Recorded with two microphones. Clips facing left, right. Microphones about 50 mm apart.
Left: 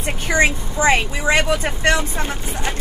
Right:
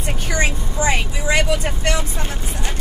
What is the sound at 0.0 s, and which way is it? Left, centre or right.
Speech, left.